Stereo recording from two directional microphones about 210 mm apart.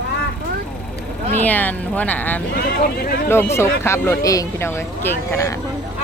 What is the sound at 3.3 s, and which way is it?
Speech, 10° left (ahead or behind).